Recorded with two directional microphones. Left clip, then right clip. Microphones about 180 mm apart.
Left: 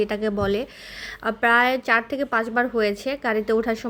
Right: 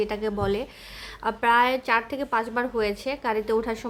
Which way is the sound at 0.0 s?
20° left (ahead or behind).